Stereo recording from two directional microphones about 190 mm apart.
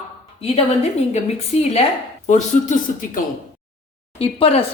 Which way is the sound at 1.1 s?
35° left (ahead or behind).